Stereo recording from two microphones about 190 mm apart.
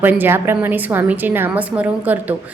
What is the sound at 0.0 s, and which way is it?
A woman's voice, 10° right (ahead or behind).